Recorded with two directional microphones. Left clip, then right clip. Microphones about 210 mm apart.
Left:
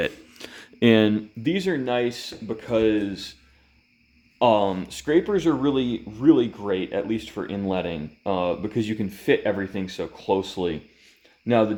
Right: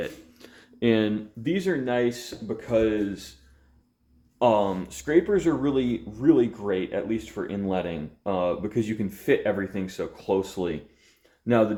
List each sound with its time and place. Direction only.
0.0 s a man's voice: 55° left (ahead or behind); by 3.2 s 40° left (ahead or behind)
4.4 s a man's voice: 35° left (ahead or behind)